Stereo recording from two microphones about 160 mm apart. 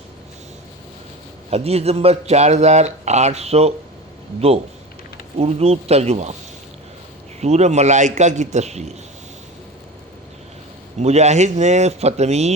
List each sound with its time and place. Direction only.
1.5 s a man's voice: 40° right (ahead or behind)
7.4 s speech: 45° right (ahead or behind)
11.0 s speech: 45° right (ahead or behind)